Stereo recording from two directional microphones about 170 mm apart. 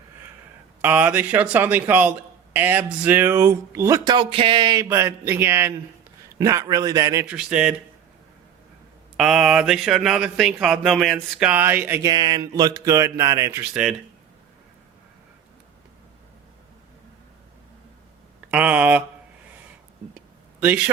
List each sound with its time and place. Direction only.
0.8 s a man's voice: 10° right (ahead or behind)
7.3 s speech: 5° right (ahead or behind)
9.1 s speech: 5° right (ahead or behind)
12.1 s a man's voice: 25° right (ahead or behind); by 13.9 s 5° right (ahead or behind)
18.5 s a man's voice: 5° right (ahead or behind)
20.6 s a man's voice: 10° right (ahead or behind)